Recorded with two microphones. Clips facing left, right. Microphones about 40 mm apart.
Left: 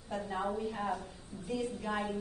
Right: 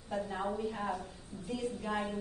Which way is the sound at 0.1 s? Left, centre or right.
Centre.